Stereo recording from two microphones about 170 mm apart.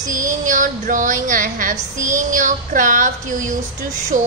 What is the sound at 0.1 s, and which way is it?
A woman's voice, 50° right (ahead or behind).